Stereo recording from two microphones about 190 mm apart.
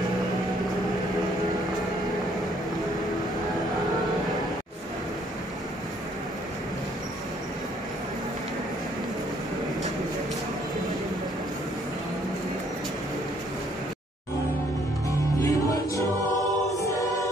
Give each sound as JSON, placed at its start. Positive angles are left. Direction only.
{"t": 15.0, "sound": "music", "side_deg": 15}
{"t": 16.7, "sound": "choir", "side_deg": 15}